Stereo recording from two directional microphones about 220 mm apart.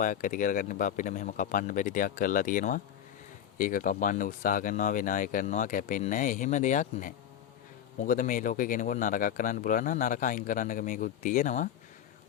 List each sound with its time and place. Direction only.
0.0 s speech: 35° left (ahead or behind)